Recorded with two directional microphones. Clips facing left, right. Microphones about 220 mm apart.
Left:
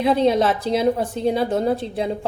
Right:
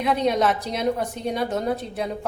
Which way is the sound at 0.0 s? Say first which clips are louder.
Left 4 dB; 30° left (ahead or behind).